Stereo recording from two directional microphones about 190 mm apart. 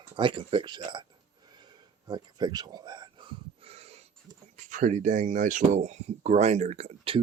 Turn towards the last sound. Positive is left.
turn(degrees=-35)  # may be behind; listen again after turning